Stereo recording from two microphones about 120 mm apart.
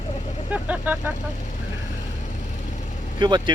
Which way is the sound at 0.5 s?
15° right (ahead or behind).